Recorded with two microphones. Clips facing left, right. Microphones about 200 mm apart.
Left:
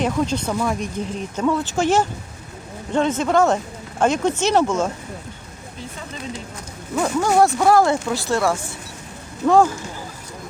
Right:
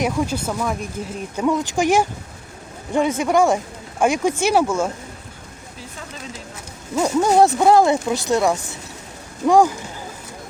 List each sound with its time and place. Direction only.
0.0 s speech: 10° right (ahead or behind)
1.4 s speech: 15° right (ahead or behind)
6.9 s speech: 20° right (ahead or behind)